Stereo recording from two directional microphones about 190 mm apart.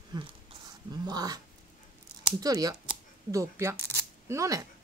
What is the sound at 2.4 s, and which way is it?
Speech, 20° right (ahead or behind).